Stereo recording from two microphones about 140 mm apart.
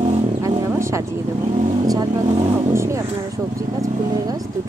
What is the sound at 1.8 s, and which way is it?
Speech, 25° right (ahead or behind).